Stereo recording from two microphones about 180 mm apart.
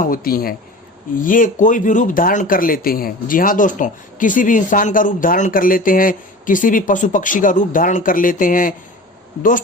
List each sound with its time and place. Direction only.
0.0 s speech: 55° left (ahead or behind)